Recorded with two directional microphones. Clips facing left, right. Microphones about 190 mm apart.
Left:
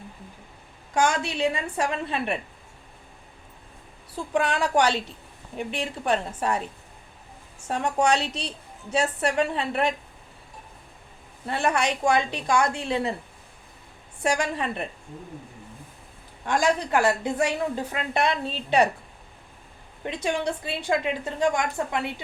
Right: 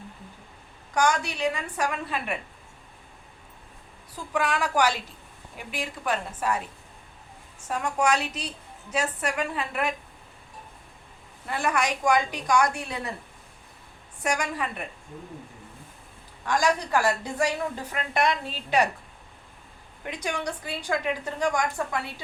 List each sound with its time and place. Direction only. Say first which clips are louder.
0.9 s a woman's voice: left 1 dB; 25° left (ahead or behind)
4.1 s a woman's voice: left 2 dB; 30° left (ahead or behind)
7.7 s a woman's voice: left 2 dB; 30° left (ahead or behind)
11.4 s a woman's voice: left 2 dB; 30° left (ahead or behind)
14.2 s a woman's voice: left 3 dB; 30° left (ahead or behind)
16.5 s a woman's voice: left 1 dB; 25° left (ahead or behind)
20.1 s a woman's voice: left 4 dB; 25° left (ahead or behind)